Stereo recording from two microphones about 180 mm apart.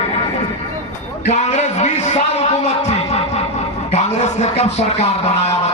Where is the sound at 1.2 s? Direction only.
40° left (ahead or behind).